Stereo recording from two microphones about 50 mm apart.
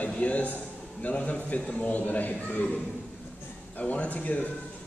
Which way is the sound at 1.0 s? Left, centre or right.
Left.